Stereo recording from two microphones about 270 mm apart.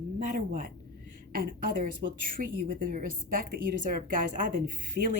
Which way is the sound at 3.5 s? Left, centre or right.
Right.